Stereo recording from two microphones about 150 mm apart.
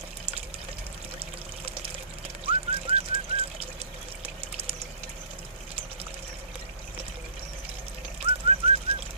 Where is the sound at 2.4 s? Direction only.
40° right (ahead or behind).